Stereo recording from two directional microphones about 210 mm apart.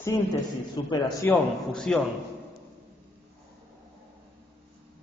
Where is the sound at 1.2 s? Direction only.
10° left (ahead or behind).